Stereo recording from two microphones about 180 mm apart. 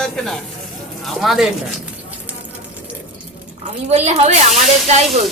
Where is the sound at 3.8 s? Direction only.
35° right (ahead or behind).